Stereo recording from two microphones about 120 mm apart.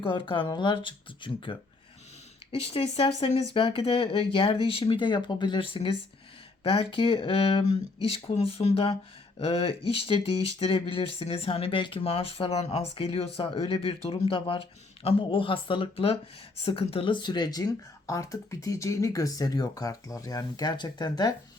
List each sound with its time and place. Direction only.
0.0 s speech: 45° left (ahead or behind)
2.5 s speech: 55° left (ahead or behind); by 21.3 s 35° left (ahead or behind)